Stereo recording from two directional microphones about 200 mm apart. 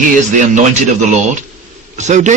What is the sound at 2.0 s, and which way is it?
Speech, 35° right (ahead or behind).